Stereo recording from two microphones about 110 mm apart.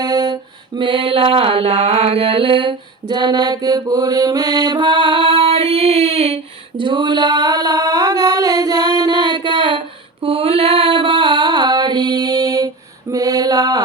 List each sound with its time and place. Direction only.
0.0 s mantra: 40° right (ahead or behind)
0.8 s mantra: 50° right (ahead or behind); by 6.4 s 70° right (ahead or behind)
6.7 s a sound: 45° right (ahead or behind)